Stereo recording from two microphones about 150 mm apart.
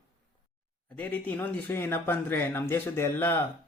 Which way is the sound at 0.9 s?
10° left (ahead or behind).